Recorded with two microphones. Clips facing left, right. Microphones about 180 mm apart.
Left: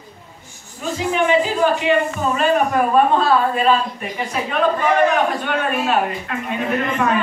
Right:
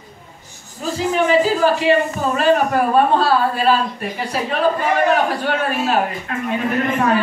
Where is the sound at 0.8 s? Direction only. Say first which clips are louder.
Right 1 dB; 35° right (ahead or behind).